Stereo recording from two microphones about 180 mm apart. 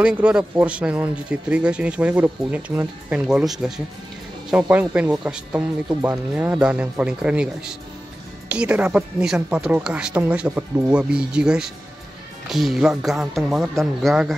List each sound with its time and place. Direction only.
0.0 s speech: 5° right (ahead or behind)